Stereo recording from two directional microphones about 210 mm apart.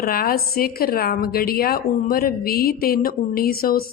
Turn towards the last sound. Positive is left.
turn(degrees=45)  # may be behind; listen again after turning